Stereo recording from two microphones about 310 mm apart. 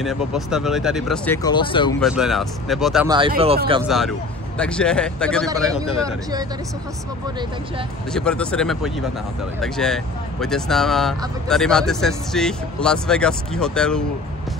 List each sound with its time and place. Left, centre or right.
0.0 s speech: centre
2.0 s speech: centre
3.1 s speech: centre
3.9 s speech: centre
5.8 s speech: centre
8.1 s speech: centre